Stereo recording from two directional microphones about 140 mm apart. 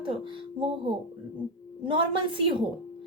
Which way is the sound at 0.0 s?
35° right (ahead or behind).